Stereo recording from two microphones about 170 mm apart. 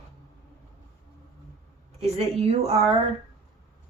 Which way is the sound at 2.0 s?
40° right (ahead or behind).